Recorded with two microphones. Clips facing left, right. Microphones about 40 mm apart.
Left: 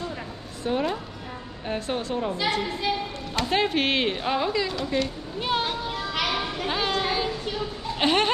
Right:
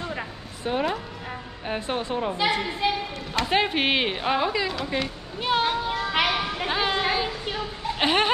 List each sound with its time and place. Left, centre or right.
0.0 s a sound: right
0.7 s a woman's voice: centre
6.1 s children playing: right
6.7 s speech: centre